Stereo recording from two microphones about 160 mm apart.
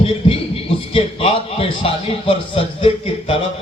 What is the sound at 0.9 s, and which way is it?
Speech, 35° left (ahead or behind).